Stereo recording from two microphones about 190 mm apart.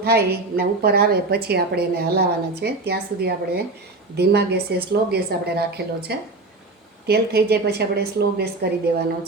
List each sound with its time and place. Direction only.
0.0 s a woman's voice: 55° right (ahead or behind)